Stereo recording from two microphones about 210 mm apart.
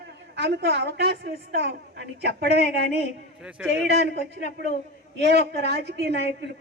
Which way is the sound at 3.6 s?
5° right (ahead or behind).